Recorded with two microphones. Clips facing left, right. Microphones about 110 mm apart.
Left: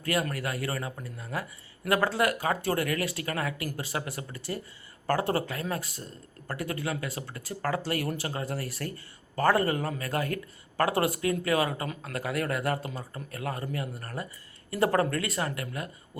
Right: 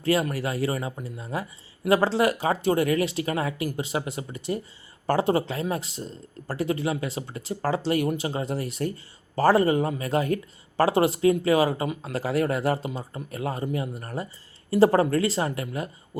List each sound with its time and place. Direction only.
0.0 s speech: 25° right (ahead or behind)